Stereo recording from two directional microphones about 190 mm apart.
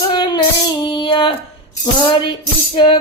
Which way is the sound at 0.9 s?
25° left (ahead or behind).